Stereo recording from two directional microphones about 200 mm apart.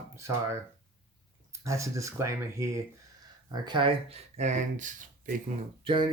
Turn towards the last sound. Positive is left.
turn(degrees=-25)  # may be behind; listen again after turning